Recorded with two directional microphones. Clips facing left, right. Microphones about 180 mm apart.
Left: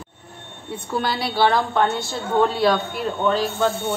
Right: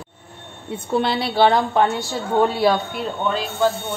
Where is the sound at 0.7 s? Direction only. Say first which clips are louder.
Right 4 dB; 25° right (ahead or behind).